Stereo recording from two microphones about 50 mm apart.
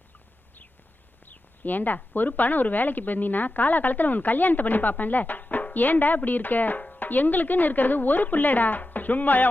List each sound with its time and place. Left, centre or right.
1.2 s a woman's voice: left